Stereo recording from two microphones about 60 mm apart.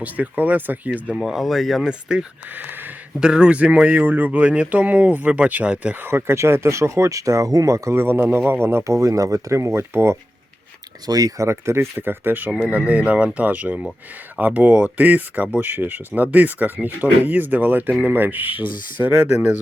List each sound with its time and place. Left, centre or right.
0.0 s speech: right
1.1 s speech: centre
1.9 s speech: centre
4.0 s speech: right
6.1 s speech: right
7.9 s speech: right
11.0 s speech: right
11.4 s speech: right
12.5 s speech: right